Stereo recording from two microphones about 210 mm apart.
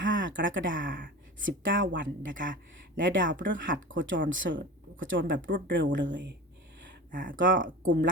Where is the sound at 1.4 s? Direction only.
60° right (ahead or behind).